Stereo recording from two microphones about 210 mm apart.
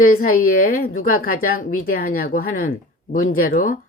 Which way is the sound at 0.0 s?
40° left (ahead or behind).